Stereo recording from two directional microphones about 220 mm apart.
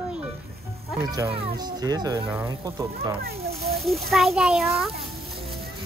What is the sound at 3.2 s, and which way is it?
Speech, 45° right (ahead or behind).